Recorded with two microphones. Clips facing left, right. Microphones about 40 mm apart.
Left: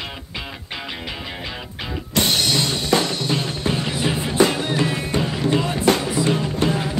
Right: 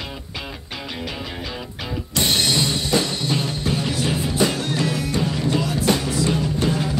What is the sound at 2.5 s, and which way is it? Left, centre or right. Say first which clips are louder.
Music: left 1 dB; left.